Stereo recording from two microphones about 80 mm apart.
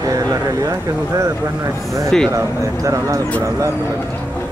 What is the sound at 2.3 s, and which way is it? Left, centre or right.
Speech, right.